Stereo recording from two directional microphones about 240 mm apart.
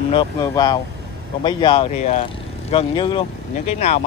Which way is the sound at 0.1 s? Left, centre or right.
Centre.